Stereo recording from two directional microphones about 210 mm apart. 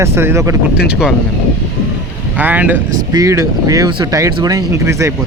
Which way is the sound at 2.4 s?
10° right (ahead or behind).